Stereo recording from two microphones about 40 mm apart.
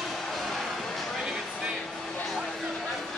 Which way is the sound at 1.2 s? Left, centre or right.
Centre.